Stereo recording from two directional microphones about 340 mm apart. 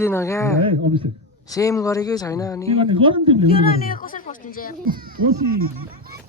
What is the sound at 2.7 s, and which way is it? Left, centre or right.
Speech, centre.